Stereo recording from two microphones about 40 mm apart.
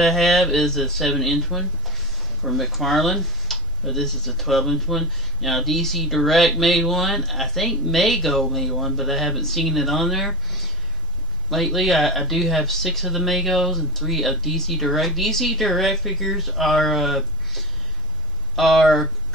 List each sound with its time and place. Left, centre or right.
0.0 s speech: centre
11.5 s speech: centre